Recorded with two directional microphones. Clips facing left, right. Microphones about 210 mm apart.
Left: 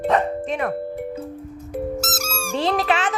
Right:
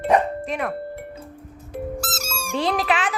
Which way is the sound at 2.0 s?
20° left (ahead or behind).